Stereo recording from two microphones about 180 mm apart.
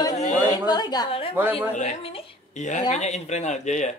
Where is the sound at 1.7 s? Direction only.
35° left (ahead or behind).